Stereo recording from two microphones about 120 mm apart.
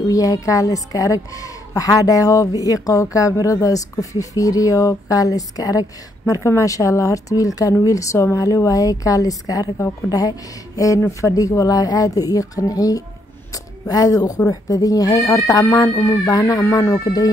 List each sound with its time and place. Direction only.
0.1 s a woman's voice: 30° left (ahead or behind)
13.5 s a sound: 30° left (ahead or behind)
14.5 s a woman's voice: 30° left (ahead or behind)